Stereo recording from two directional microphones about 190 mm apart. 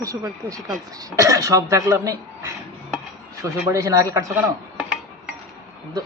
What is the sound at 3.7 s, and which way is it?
Speech, 15° right (ahead or behind).